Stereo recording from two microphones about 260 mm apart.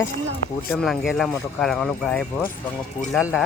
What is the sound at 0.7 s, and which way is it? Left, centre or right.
Speech, centre.